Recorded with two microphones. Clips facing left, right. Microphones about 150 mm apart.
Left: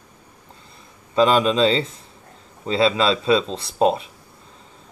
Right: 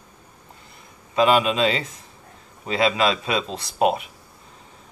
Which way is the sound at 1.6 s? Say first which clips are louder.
Left 4 dB; 30° left (ahead or behind).